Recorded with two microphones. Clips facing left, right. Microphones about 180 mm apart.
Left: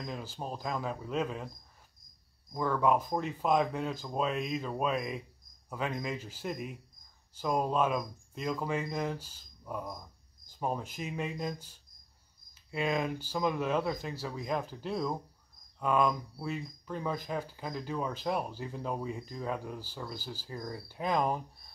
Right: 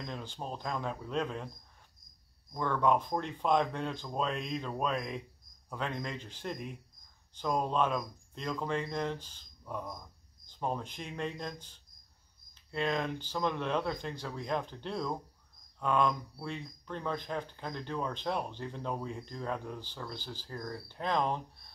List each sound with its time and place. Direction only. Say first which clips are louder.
0.0 s speech: left 1 dB; 5° left (ahead or behind)
2.5 s speech: left 1 dB; 5° left (ahead or behind)